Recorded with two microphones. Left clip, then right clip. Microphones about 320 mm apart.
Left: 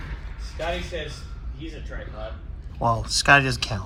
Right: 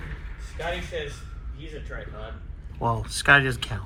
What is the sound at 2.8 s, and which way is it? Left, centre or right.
Speech, centre.